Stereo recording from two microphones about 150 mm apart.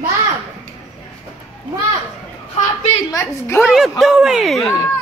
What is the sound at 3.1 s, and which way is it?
Speech, 15° left (ahead or behind).